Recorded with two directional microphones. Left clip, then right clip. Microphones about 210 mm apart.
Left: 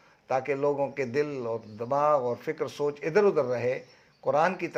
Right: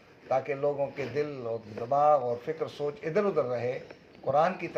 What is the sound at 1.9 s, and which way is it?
Speech, 35° left (ahead or behind).